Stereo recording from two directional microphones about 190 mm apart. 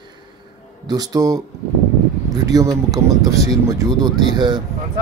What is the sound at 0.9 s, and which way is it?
Speech, 20° right (ahead or behind).